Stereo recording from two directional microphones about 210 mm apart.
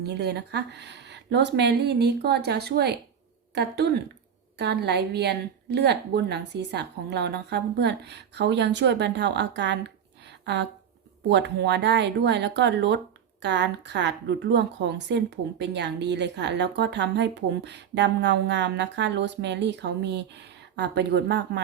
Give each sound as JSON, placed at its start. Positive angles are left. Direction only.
{"t": 0.0, "sound": "a woman's voice", "side_deg": -50}